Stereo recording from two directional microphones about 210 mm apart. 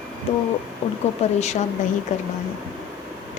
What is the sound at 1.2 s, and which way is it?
A woman's voice, 30° left (ahead or behind).